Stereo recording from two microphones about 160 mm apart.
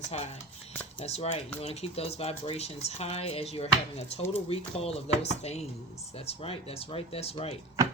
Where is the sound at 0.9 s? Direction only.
40° left (ahead or behind).